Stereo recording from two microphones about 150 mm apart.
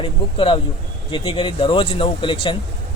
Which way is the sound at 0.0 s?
35° left (ahead or behind).